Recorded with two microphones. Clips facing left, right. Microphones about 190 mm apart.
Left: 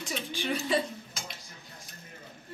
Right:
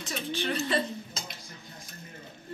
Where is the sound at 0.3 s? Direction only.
10° left (ahead or behind).